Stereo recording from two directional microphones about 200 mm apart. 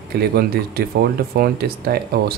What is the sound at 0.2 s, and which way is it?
Speech, 50° right (ahead or behind).